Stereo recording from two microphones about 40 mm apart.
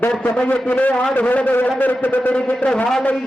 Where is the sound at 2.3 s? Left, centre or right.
Left.